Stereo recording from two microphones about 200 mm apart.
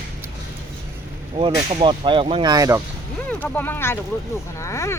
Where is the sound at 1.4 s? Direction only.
25° right (ahead or behind).